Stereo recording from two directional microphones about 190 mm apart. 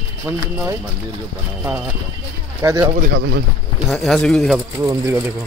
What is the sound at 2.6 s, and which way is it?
Speech, 15° right (ahead or behind).